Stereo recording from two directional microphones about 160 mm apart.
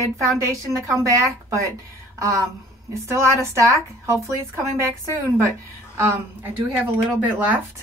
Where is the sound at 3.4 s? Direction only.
15° right (ahead or behind).